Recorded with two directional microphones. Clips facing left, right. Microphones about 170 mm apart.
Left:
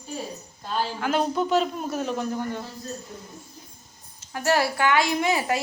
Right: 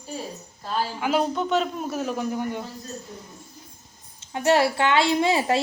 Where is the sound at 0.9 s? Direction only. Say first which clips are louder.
Right 2 dB; 10° right (ahead or behind).